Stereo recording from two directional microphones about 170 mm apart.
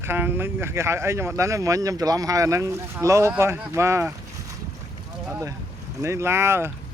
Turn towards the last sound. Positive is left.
turn(degrees=-15)  # may be behind; listen again after turning